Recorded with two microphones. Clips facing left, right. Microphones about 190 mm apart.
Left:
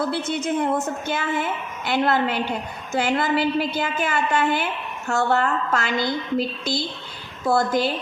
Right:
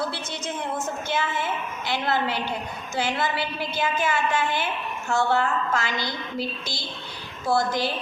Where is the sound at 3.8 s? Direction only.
60° left (ahead or behind).